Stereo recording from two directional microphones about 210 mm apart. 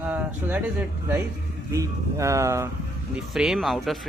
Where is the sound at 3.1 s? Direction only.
5° right (ahead or behind).